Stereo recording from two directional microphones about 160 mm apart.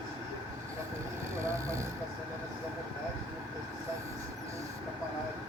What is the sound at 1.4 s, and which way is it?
Vehicle, 20° right (ahead or behind).